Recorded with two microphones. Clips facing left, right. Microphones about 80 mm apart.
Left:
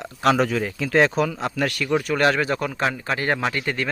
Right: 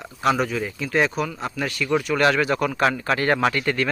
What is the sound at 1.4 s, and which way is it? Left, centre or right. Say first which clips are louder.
Speech: left 3 dB; left.